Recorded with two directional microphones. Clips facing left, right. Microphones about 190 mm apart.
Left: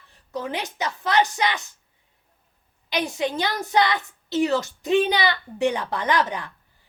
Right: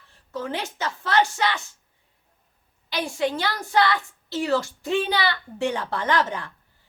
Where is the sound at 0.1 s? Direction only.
15° left (ahead or behind).